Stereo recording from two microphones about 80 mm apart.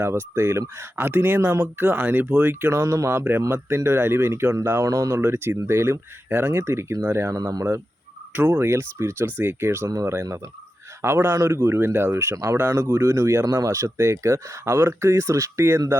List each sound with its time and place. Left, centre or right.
0.0 s speech: right
7.3 s speech: right
8.3 s speech: right
11.0 s speech: right